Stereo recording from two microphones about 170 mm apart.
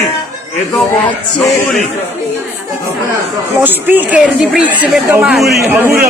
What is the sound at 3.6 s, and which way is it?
Speech, 10° right (ahead or behind).